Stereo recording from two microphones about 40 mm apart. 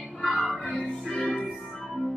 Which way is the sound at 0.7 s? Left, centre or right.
Left.